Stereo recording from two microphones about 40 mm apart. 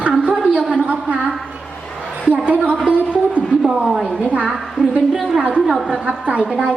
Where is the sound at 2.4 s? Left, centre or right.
Right.